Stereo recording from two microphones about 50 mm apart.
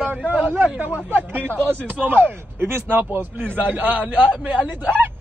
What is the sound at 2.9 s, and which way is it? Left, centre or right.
A man's voice, right.